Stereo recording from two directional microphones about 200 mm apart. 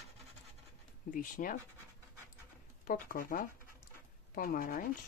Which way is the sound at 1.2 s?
40° left (ahead or behind).